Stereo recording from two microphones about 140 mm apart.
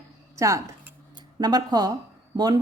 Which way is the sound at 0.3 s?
20° right (ahead or behind).